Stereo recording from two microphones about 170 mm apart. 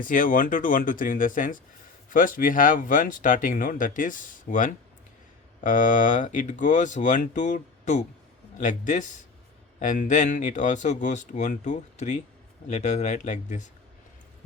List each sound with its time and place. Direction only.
0.0 s speech: 50° left (ahead or behind)